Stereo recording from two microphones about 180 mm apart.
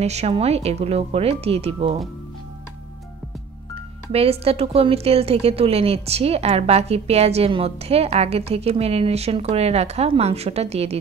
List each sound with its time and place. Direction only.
0.0 s a woman's voice: 35° right (ahead or behind)
4.1 s a woman's voice: 35° right (ahead or behind)